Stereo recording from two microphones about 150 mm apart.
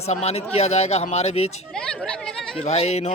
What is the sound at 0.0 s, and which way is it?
Speech, 45° left (ahead or behind).